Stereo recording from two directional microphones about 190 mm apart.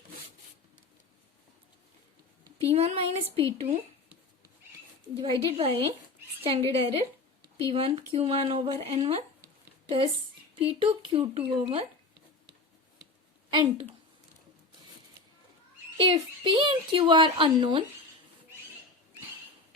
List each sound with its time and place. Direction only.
2.6 s a woman's voice: 30° right (ahead or behind)
5.1 s a woman's voice: 30° right (ahead or behind)
10.8 s a woman's voice: 25° right (ahead or behind)
16.0 s a woman's voice: 25° right (ahead or behind)